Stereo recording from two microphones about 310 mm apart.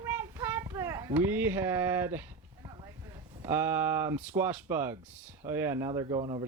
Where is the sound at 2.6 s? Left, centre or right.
Centre.